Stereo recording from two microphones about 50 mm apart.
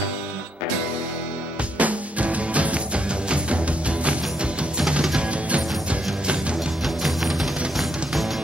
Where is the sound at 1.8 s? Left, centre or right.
Right.